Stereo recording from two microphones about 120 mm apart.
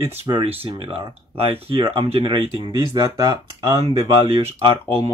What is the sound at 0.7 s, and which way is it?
Speech, 45° right (ahead or behind).